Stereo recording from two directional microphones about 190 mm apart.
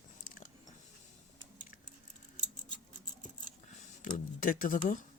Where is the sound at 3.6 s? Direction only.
40° left (ahead or behind).